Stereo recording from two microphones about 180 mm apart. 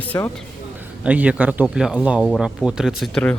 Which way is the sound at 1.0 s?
5° right (ahead or behind).